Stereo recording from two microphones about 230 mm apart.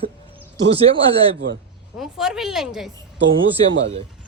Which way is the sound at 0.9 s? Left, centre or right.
Right.